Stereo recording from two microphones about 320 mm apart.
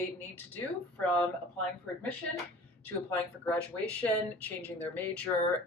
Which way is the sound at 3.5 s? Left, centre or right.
Centre.